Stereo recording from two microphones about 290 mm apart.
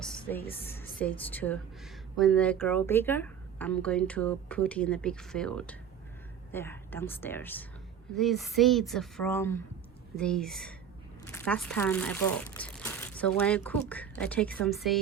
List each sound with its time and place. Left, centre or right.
0.0 s music: centre
0.7 s a woman's voice: centre